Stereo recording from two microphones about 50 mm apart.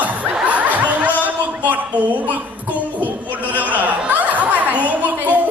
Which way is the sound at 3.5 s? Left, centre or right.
Right.